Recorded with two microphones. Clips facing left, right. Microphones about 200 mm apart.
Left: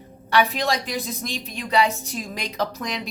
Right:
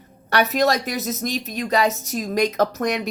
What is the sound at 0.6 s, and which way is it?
Speech, 45° right (ahead or behind).